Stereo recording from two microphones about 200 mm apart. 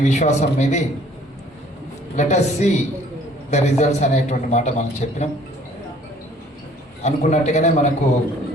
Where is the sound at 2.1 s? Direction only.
35° left (ahead or behind).